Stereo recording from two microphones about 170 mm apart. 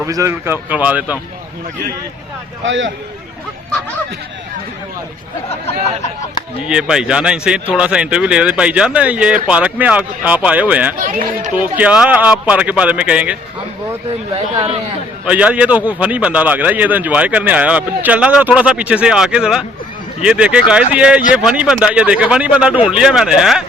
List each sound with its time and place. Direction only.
0.0 s a man's voice: 20° right (ahead or behind)
2.6 s a man's voice: 90° right
5.6 s speech: 40° left (ahead or behind)
6.7 s a man's voice: 5° right (ahead or behind)
11.0 s speech: 50° right (ahead or behind)
11.5 s a man's voice: 10° right (ahead or behind)
15.2 s a man's voice: 5° right (ahead or behind)